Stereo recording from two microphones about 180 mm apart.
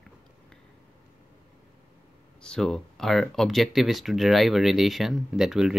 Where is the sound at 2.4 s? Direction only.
5° left (ahead or behind).